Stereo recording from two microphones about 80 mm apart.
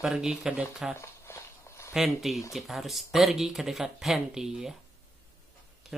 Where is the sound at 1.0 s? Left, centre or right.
Left.